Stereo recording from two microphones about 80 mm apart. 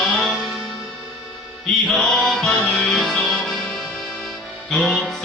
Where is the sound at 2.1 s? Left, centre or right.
Centre.